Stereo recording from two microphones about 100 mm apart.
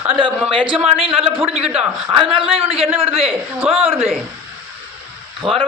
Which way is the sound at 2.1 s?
60° right (ahead or behind).